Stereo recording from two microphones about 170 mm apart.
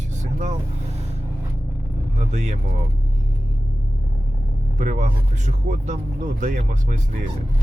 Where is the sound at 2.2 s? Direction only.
40° right (ahead or behind).